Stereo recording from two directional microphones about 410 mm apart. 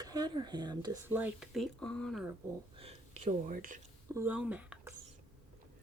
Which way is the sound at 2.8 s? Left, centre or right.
Centre.